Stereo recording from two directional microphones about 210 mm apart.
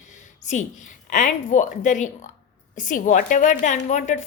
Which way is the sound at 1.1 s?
35° left (ahead or behind).